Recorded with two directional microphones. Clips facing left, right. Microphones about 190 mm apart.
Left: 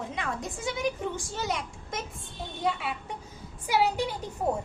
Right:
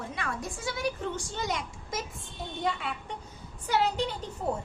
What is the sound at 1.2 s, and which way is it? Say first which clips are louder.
A child's voice: left 1 dB; 5° left (ahead or behind).